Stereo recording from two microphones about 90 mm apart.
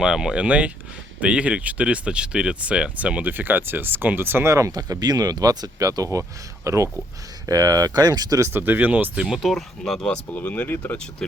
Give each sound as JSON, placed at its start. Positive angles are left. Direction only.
{"t": 0.0, "sound": "speech", "side_deg": -10}
{"t": 4.7, "sound": "speech", "side_deg": -45}
{"t": 8.5, "sound": "speech", "side_deg": -20}
{"t": 9.2, "sound": "speech", "side_deg": 0}
{"t": 10.3, "sound": "speech", "side_deg": 20}
{"t": 10.9, "sound": "speech", "side_deg": 10}